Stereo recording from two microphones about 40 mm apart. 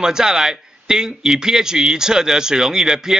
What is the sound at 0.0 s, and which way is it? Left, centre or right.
Speech, centre.